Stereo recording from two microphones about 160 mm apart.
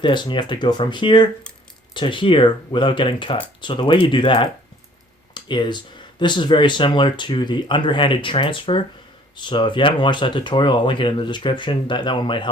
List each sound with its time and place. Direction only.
0.0 s speech: 30° left (ahead or behind)